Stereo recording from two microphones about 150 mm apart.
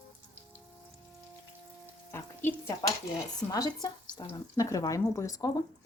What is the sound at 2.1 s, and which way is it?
Stir, 15° left (ahead or behind).